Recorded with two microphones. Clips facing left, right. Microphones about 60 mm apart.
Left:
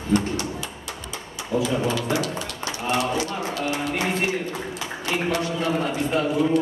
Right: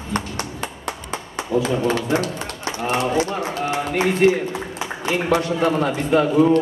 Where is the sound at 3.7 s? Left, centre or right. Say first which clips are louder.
Right 7 dB; right.